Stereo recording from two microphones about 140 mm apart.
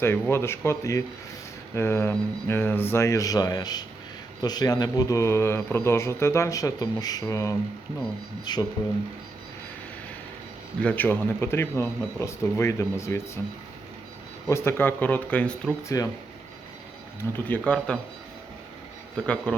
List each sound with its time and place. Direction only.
0.0 s speech: 15° left (ahead or behind)
10.8 s speech: 10° left (ahead or behind)
14.4 s speech: 20° left (ahead or behind)
15.9 s speech: 25° left (ahead or behind)
17.2 s speech: 20° left (ahead or behind)
17.9 s speech: 10° left (ahead or behind)
19.1 s speech: 5° left (ahead or behind)